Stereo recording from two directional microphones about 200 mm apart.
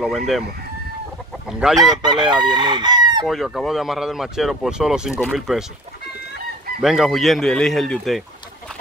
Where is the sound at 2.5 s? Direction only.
20° right (ahead or behind).